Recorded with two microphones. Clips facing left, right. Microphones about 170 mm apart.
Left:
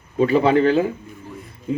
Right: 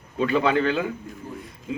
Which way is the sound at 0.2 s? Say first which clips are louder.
Left 6 dB; 35° left (ahead or behind).